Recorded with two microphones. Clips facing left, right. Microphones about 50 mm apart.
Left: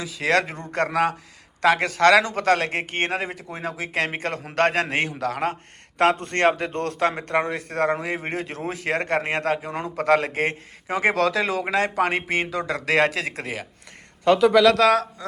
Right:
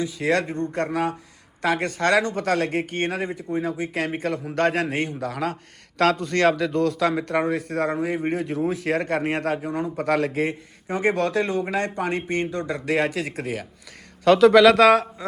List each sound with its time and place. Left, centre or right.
0.0 s a man's voice: left
0.7 s speech: left
6.0 s speech: left
7.9 s speech: left
9.6 s speech: left
10.4 s a man's voice: left
11.7 s a man's voice: left
14.3 s a man's voice: centre
14.5 s speech: centre